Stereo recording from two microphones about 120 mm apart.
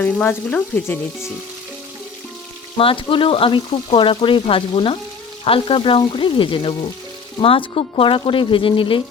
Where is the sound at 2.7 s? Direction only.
45° left (ahead or behind).